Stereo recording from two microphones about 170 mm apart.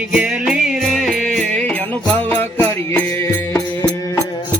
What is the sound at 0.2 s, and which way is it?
Music, 5° right (ahead or behind).